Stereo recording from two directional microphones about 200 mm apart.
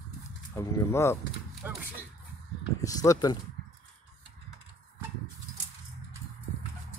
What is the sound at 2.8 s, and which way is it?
Speech, 15° left (ahead or behind).